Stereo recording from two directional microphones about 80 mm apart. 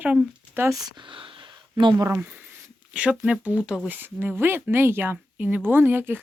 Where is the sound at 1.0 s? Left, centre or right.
Right.